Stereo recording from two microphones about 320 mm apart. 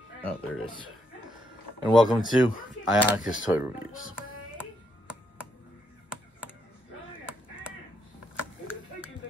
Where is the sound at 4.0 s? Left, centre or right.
Left.